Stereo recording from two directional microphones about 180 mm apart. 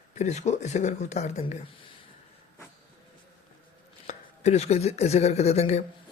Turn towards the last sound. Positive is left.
turn(degrees=35)  # may be behind; listen again after turning